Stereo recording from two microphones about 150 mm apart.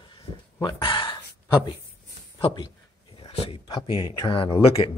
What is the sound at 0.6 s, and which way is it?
Speech, 30° left (ahead or behind).